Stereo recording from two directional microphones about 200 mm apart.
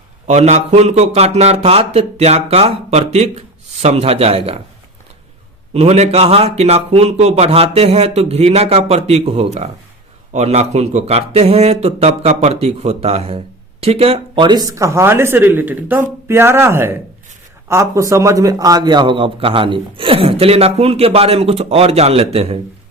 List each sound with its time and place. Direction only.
0.3 s speech: 35° right (ahead or behind)
5.7 s a man's voice: 30° right (ahead or behind)